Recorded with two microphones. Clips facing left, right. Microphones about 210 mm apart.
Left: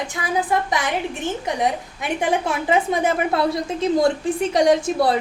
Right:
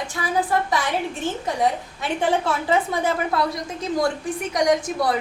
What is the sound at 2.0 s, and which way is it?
A woman's voice, 15° left (ahead or behind).